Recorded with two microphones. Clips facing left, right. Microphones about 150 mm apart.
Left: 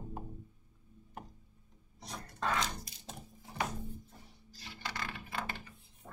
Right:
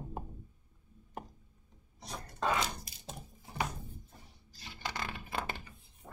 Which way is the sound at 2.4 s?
10° right (ahead or behind).